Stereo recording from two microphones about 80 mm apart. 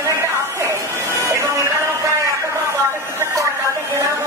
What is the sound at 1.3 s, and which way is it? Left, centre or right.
Music, right.